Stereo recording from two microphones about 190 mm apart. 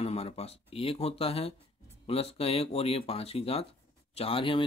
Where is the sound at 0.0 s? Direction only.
30° left (ahead or behind).